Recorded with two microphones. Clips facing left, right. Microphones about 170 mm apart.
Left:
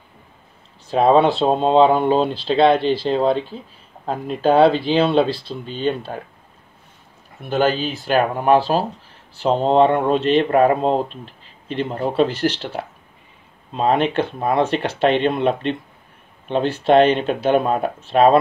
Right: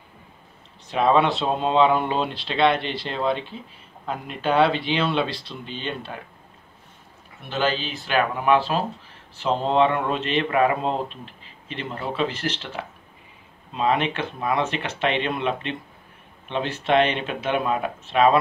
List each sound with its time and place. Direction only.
0.8 s speech: 35° left (ahead or behind)
7.4 s speech: 45° left (ahead or behind)